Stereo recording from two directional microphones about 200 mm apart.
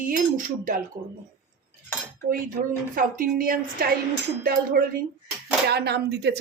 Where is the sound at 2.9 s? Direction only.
45° right (ahead or behind).